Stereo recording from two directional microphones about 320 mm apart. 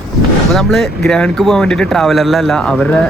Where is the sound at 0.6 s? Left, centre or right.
Centre.